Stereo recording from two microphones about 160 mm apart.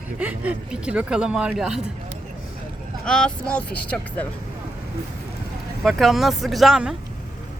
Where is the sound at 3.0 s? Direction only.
5° left (ahead or behind).